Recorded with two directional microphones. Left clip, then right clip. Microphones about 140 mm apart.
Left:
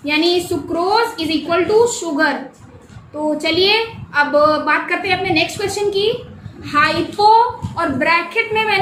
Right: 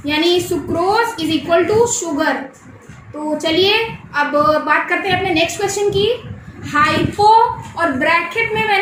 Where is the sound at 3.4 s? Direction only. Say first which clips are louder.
Right 1 dB; 20° left (ahead or behind).